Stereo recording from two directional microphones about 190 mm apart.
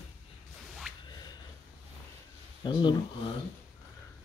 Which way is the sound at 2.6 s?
25° left (ahead or behind).